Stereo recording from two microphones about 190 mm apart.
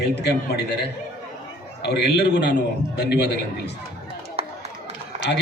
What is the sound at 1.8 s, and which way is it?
A man's voice, 60° left (ahead or behind).